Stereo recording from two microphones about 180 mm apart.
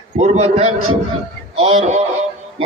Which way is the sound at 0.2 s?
35° right (ahead or behind).